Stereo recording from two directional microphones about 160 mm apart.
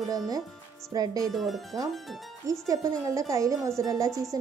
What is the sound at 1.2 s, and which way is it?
Speech, centre (ahead or behind).